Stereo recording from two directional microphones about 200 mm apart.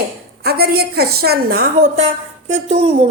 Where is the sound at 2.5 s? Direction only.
30° right (ahead or behind).